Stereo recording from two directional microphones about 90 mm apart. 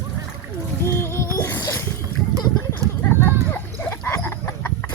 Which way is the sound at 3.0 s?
20° left (ahead or behind).